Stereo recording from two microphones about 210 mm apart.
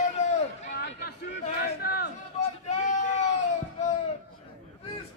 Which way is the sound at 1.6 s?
50° left (ahead or behind).